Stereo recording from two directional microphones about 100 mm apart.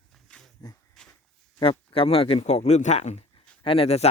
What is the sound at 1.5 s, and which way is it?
Speech, 65° left (ahead or behind).